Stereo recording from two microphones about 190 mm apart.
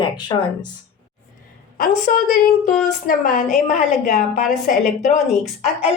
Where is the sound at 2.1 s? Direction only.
45° left (ahead or behind).